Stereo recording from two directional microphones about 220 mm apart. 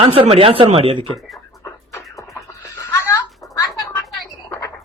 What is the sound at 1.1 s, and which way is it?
Speech, centre (ahead or behind).